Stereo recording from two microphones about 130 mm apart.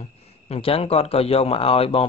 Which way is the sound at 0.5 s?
50° left (ahead or behind).